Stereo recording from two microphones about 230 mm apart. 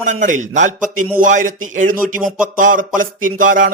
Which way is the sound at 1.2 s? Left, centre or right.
Right.